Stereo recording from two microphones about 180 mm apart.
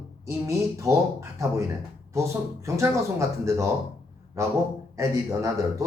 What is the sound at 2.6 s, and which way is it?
A man's voice, 15° right (ahead or behind).